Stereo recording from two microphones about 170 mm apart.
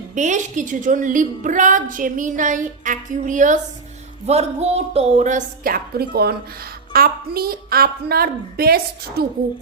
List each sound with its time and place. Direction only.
0.1 s a woman's voice: 45° right (ahead or behind)
4.3 s a woman's voice: 40° right (ahead or behind); by 9.2 s 65° right (ahead or behind)